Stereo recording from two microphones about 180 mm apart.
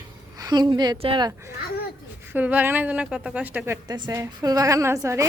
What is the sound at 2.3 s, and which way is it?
A woman's voice, 10° right (ahead or behind).